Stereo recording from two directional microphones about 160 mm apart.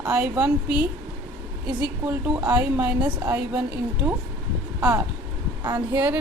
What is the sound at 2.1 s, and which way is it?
Speech, 20° right (ahead or behind).